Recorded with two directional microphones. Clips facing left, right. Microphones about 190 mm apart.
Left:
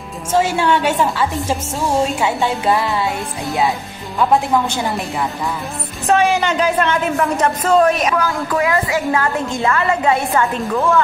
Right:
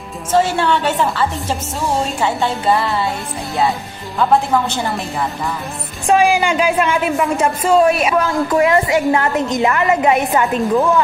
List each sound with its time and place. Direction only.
0.3 s a woman's voice: 10° left (ahead or behind)
6.0 s speech: 10° right (ahead or behind)
8.2 s a woman's voice: 25° right (ahead or behind)